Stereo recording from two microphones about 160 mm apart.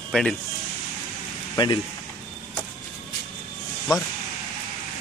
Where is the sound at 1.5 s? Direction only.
25° left (ahead or behind).